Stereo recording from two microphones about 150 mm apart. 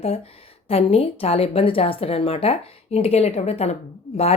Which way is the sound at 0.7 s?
40° left (ahead or behind).